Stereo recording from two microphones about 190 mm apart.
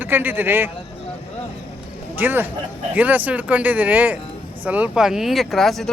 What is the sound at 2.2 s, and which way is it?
Speech, 10° right (ahead or behind).